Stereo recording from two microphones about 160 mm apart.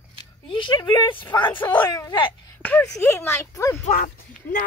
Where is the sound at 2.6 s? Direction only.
10° left (ahead or behind).